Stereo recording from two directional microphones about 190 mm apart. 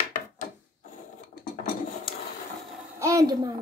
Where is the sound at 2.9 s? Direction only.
15° right (ahead or behind).